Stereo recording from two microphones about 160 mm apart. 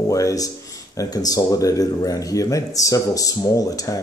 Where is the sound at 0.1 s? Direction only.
20° left (ahead or behind).